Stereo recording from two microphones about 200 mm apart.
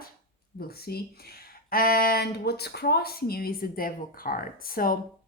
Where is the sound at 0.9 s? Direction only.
50° left (ahead or behind).